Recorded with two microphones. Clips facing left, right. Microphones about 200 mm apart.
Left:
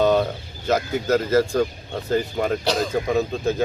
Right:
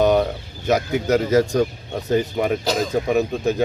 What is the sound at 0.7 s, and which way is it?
Speech, 15° right (ahead or behind).